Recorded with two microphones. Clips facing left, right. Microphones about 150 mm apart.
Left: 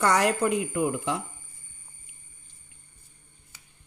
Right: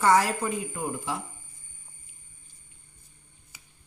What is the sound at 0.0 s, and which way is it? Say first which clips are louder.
A man's voice: even; 75° left (ahead or behind).